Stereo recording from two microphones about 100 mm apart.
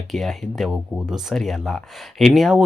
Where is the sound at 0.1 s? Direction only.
Centre (ahead or behind).